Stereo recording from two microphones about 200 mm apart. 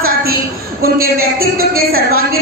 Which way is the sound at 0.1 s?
50° right (ahead or behind).